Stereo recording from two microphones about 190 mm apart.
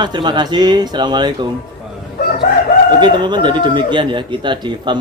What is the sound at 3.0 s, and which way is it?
Speech, 25° right (ahead or behind).